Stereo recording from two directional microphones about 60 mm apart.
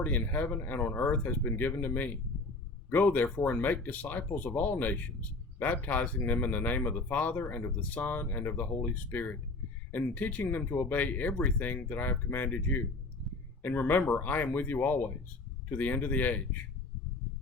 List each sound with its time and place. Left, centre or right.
0.0 s speech: left